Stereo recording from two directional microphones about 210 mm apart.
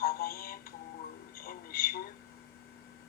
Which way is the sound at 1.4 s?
45° left (ahead or behind).